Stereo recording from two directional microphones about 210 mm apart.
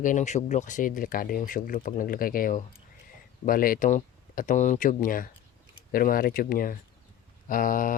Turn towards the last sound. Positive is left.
turn(degrees=40)  # may be behind; listen again after turning